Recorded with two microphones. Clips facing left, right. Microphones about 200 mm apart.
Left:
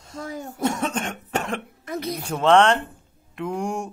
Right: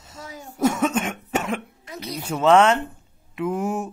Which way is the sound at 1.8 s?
55° left (ahead or behind).